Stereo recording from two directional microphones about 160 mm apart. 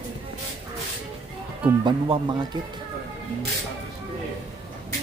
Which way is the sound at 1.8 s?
30° right (ahead or behind).